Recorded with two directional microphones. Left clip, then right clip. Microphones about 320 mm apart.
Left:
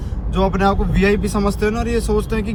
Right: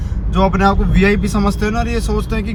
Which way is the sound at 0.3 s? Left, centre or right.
Centre.